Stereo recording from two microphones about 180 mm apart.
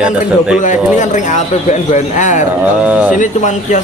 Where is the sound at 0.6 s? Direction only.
45° left (ahead or behind).